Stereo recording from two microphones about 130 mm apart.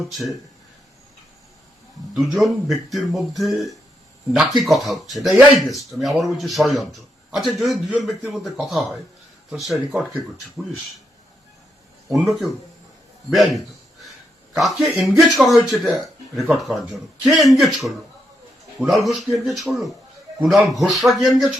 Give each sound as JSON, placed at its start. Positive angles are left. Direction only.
{"t": 0.1, "sound": "a man's voice", "side_deg": 0}
{"t": 2.1, "sound": "a man's voice", "side_deg": 0}
{"t": 12.1, "sound": "a man's voice", "side_deg": 0}